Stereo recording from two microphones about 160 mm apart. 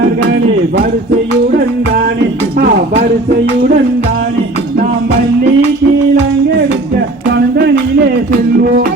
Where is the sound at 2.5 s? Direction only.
70° right (ahead or behind).